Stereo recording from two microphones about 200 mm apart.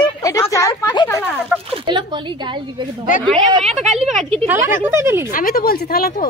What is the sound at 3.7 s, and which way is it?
Speech, 35° right (ahead or behind).